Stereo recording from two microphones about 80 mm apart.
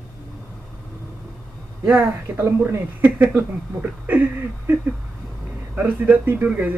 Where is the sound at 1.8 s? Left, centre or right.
Right.